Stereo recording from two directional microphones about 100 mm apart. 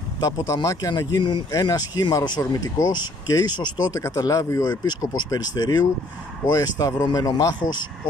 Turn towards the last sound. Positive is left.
turn(degrees=45)  # may be behind; listen again after turning